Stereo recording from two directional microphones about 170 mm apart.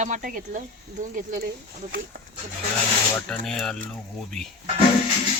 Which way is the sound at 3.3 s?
5° left (ahead or behind).